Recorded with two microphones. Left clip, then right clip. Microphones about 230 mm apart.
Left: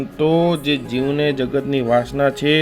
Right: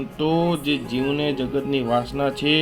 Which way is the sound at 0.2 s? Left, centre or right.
Left.